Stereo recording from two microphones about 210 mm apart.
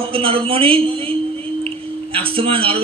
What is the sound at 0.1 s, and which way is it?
A man's voice, 25° right (ahead or behind).